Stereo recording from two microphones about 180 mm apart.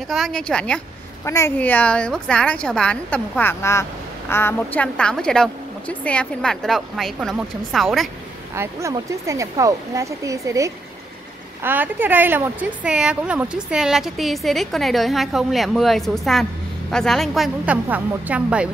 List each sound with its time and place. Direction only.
0.1 s a woman's voice: centre (ahead or behind)
8.5 s speech: 15° right (ahead or behind)